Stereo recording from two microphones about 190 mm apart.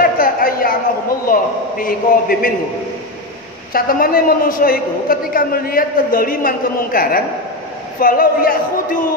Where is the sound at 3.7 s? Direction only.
50° left (ahead or behind).